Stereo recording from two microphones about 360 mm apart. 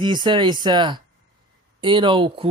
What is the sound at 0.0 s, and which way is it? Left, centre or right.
Speech, centre.